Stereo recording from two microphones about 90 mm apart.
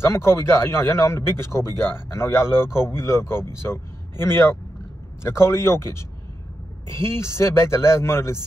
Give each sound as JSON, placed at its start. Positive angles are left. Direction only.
{"t": 0.0, "sound": "speech", "side_deg": 30}